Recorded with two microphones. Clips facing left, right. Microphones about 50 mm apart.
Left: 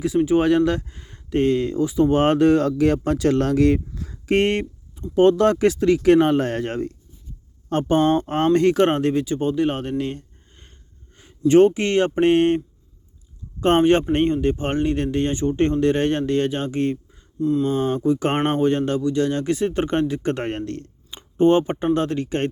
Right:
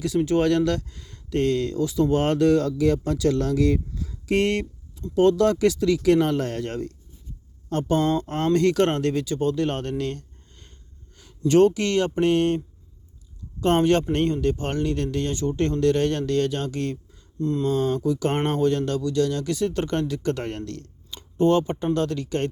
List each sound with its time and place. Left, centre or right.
0.2 s speech: centre
10.0 s a sound: centre
11.2 s speech: left
17.4 s mantra: centre
17.7 s speech: left